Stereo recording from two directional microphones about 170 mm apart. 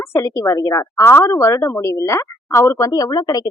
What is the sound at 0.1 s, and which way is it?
A woman's voice, 20° left (ahead or behind).